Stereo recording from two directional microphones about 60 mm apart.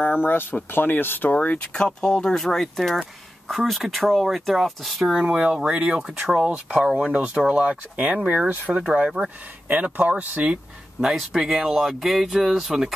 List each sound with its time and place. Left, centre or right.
0.0 s speech: left
1.7 s speech: centre
5.2 s speech: centre
8.3 s speech: right
9.9 s speech: right
11.0 s speech: centre